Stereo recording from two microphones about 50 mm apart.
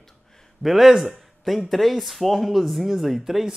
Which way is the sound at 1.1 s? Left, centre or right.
Centre.